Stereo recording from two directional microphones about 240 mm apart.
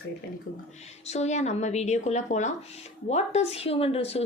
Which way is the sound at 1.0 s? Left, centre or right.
Left.